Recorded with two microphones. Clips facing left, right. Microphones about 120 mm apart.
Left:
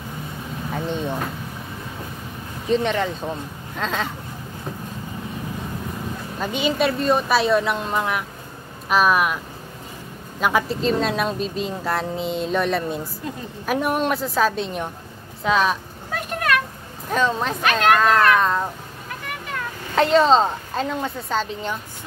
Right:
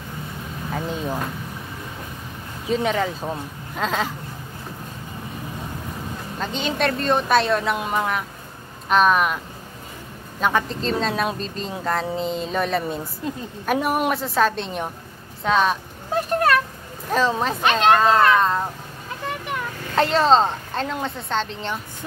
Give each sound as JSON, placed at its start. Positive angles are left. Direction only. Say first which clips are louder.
{"t": 0.7, "sound": "a woman's voice", "louder": "left 1 dB", "side_deg": 0}
{"t": 2.7, "sound": "a woman's voice", "louder": "left 1 dB", "side_deg": -5}
{"t": 6.4, "sound": "a woman's voice", "louder": "left 2 dB", "side_deg": 10}
{"t": 10.4, "sound": "a woman's voice", "louder": "left 2 dB", "side_deg": 5}
{"t": 16.1, "sound": "a sound", "louder": "right 4 dB", "side_deg": -35}
{"t": 17.6, "sound": "speech", "louder": "right 1 dB", "side_deg": -25}
{"t": 19.2, "sound": "vehicle", "louder": "right 4 dB", "side_deg": -20}
{"t": 20.0, "sound": "a woman's voice", "louder": "left 1 dB", "side_deg": 0}